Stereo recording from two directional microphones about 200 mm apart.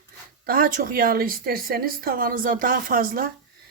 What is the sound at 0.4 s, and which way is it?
A woman's voice, 45° right (ahead or behind).